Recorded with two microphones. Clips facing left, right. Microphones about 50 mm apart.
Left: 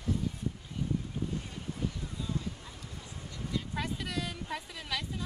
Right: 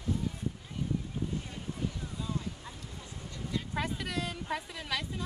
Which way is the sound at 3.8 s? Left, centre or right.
Centre.